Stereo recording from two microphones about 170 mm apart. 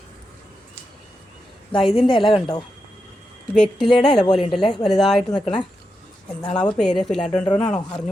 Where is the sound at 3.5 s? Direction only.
5° left (ahead or behind).